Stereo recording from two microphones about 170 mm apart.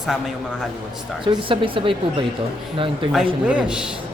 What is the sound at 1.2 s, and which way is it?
Speech, 30° right (ahead or behind).